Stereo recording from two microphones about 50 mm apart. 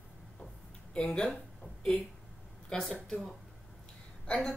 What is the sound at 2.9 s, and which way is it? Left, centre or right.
Speech, centre.